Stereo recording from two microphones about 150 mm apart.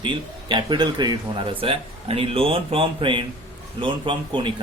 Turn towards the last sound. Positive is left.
turn(degrees=-35)  # may be behind; listen again after turning